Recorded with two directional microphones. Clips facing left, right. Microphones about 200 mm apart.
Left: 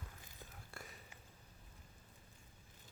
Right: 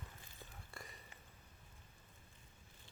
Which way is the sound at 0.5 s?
Centre (ahead or behind).